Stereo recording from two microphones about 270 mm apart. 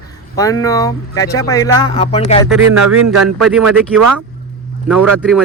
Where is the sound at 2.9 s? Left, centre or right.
Right.